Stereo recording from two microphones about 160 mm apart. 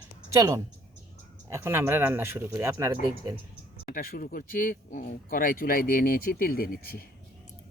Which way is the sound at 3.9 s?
65° left (ahead or behind).